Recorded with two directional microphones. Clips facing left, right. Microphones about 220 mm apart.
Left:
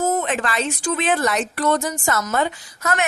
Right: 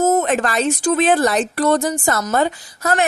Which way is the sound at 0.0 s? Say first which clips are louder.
Right 5 dB; 45° right (ahead or behind).